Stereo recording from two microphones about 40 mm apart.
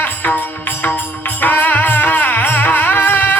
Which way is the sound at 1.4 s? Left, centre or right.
Left.